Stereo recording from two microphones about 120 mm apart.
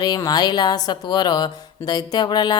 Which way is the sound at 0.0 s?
35° left (ahead or behind).